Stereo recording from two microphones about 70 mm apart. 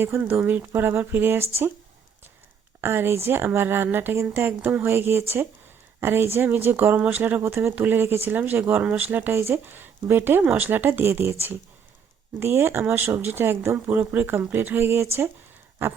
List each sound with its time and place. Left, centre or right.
0.2 s speech: right
2.8 s speech: right